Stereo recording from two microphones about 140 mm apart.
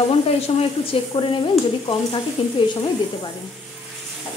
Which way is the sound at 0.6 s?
40° left (ahead or behind).